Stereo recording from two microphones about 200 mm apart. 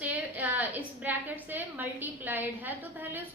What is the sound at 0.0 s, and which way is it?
A woman's voice, 10° right (ahead or behind).